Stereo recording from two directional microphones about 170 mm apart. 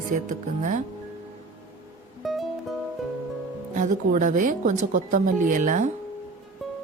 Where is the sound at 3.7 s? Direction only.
50° right (ahead or behind).